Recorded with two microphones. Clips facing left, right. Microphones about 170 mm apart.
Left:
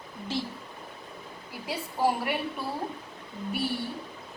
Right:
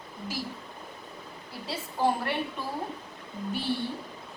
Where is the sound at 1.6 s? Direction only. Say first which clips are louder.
Even; 10° left (ahead or behind).